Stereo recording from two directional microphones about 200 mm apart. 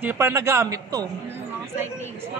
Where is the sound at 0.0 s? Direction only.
10° right (ahead or behind).